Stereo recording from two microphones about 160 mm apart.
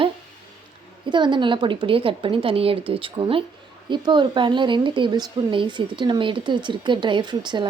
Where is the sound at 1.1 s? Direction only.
30° right (ahead or behind).